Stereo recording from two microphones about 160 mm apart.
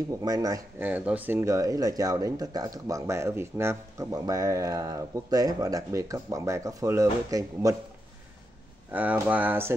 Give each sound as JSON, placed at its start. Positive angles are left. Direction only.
{"t": 0.2, "sound": "speech", "side_deg": -25}
{"t": 0.7, "sound": "speech", "side_deg": -10}
{"t": 8.9, "sound": "speech", "side_deg": -10}